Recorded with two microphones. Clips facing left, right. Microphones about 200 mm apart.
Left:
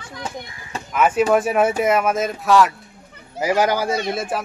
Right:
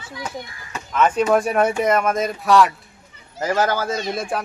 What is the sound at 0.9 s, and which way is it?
Speech, 10° left (ahead or behind).